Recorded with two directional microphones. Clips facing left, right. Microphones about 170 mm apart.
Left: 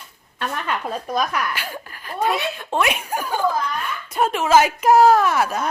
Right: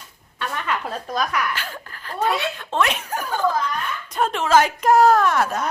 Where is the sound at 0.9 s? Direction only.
15° left (ahead or behind).